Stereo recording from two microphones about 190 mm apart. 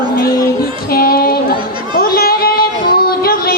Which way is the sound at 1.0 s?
50° left (ahead or behind).